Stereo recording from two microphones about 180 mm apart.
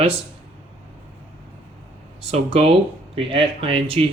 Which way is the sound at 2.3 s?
30° right (ahead or behind).